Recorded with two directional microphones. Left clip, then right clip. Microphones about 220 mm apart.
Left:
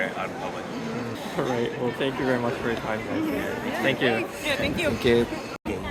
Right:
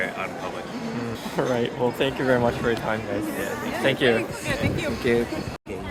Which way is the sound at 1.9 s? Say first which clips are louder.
Right 4 dB; 50° right (ahead or behind).